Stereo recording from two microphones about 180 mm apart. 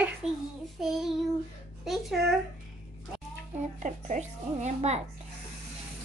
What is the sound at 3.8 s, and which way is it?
Speech, 40° right (ahead or behind).